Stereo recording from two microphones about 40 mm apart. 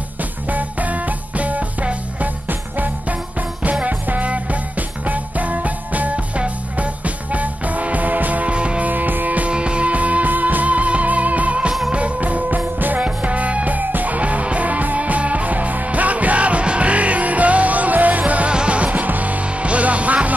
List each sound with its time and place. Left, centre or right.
0.5 s music: right
3.8 s music: right
8.5 s music: right
8.8 s music: right
9.5 s music: right
13.0 s music: right
18.5 s music: right